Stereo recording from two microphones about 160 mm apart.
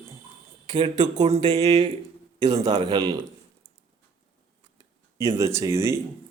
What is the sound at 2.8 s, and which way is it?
Speech, 25° right (ahead or behind).